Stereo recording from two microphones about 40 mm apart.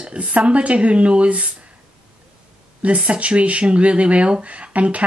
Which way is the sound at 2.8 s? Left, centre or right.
Right.